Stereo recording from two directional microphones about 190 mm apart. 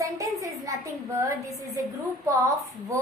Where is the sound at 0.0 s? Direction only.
15° right (ahead or behind).